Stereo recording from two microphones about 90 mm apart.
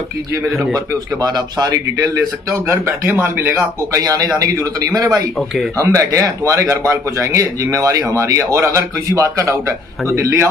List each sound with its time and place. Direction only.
0.5 s a man's voice: centre (ahead or behind)
0.7 s a man's voice: 50° right (ahead or behind)
2.7 s speech: 30° right (ahead or behind)
4.0 s a man's voice: 45° right (ahead or behind)